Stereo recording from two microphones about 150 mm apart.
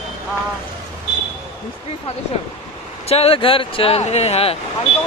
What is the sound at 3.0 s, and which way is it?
Speech, 45° left (ahead or behind).